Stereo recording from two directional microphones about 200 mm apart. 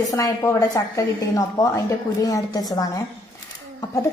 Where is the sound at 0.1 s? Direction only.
15° left (ahead or behind).